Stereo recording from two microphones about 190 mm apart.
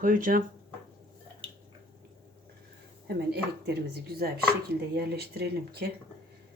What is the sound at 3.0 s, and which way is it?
Speech, 60° right (ahead or behind).